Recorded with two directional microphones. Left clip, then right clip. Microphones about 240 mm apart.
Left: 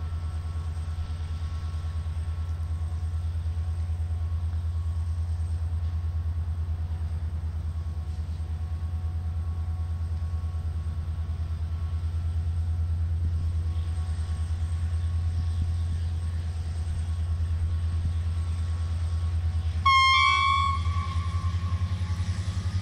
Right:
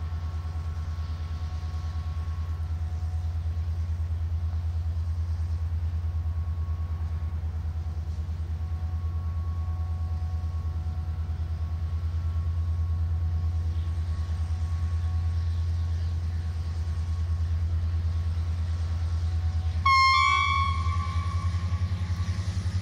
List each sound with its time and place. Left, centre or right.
19.8 s air horn: centre